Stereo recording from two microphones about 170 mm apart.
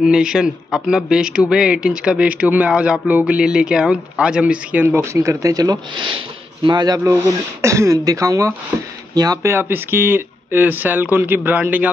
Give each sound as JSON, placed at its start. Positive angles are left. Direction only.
{"t": 0.0, "sound": "speech", "side_deg": -5}